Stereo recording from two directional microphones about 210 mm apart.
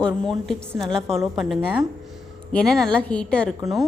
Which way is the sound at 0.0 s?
Centre (ahead or behind).